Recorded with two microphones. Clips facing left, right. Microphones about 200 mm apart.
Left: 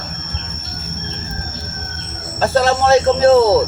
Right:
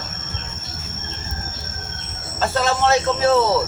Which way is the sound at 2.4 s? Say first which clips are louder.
Left 5 dB; 35° left (ahead or behind).